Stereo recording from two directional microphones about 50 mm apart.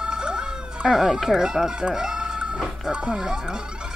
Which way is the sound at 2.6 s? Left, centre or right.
Centre.